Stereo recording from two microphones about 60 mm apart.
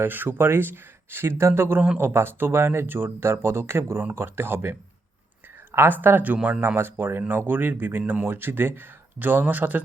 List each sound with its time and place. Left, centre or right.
0.0 s speech: right